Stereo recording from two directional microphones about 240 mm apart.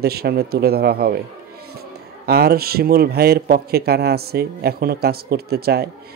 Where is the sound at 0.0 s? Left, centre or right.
Right.